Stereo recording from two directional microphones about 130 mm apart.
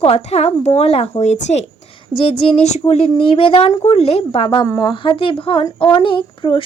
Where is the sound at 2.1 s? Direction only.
45° left (ahead or behind).